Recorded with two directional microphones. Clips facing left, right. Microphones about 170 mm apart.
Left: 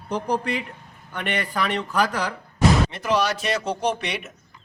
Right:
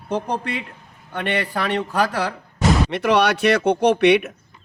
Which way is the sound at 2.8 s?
70° right (ahead or behind).